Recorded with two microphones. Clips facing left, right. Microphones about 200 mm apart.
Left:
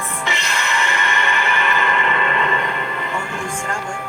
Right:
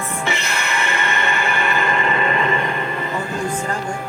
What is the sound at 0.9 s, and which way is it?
Music, 35° right (ahead or behind).